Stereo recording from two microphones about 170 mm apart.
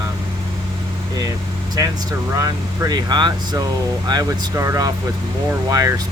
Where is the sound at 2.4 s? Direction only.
20° right (ahead or behind).